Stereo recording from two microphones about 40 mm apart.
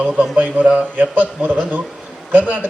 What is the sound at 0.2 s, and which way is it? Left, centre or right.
A man's voice, right.